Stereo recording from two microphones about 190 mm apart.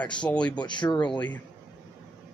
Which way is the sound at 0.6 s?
25° left (ahead or behind).